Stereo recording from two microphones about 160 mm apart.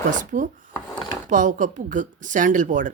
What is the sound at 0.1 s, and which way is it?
Speech, 55° right (ahead or behind).